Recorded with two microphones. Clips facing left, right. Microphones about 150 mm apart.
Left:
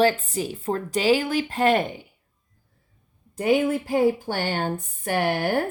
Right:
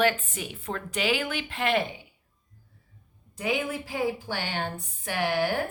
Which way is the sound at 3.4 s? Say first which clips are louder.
Left 8 dB; 50° left (ahead or behind).